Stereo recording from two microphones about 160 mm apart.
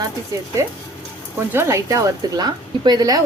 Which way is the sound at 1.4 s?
15° right (ahead or behind).